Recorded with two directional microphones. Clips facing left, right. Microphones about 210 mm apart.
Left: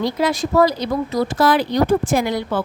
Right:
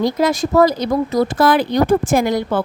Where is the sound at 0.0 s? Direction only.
45° right (ahead or behind).